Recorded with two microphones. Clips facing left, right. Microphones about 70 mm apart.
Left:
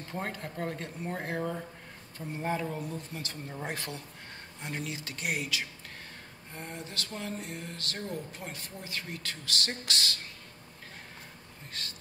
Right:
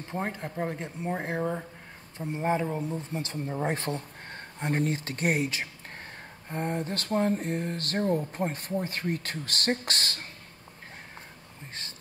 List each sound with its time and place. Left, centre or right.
0.1 s speech: right
11.7 s speech: right